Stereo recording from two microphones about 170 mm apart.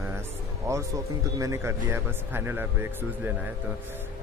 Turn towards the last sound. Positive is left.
turn(degrees=-10)  # may be behind; listen again after turning